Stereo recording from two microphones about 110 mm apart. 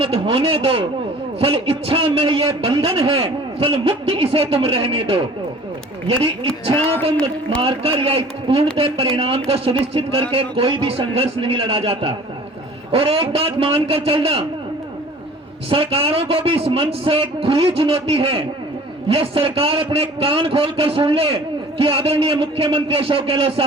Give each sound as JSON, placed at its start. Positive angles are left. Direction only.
{"t": 0.0, "sound": "a man's voice", "side_deg": -55}
{"t": 7.6, "sound": "a man's voice", "side_deg": -60}
{"t": 15.7, "sound": "a man's voice", "side_deg": -55}